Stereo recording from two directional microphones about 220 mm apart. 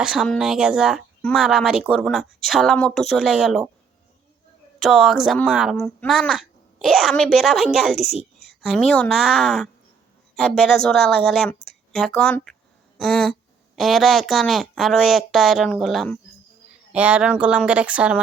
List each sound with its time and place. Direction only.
0.0 s speech: centre (ahead or behind)
4.8 s speech: centre (ahead or behind)